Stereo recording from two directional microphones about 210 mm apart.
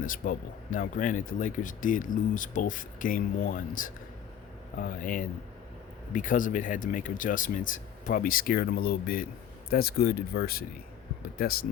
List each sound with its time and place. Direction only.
0.0 s speech: 40° left (ahead or behind)